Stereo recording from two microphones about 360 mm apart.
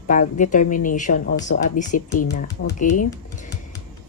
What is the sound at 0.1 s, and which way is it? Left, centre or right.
Speech, left.